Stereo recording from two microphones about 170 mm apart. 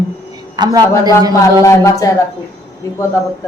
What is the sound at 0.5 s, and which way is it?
Speech, 20° right (ahead or behind).